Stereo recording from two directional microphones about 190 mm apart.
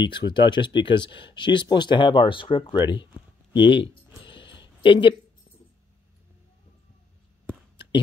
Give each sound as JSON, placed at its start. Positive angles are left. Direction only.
{"t": 0.0, "sound": "speech", "side_deg": 25}
{"t": 3.6, "sound": "a sound", "side_deg": 25}
{"t": 4.8, "sound": "speech", "side_deg": 25}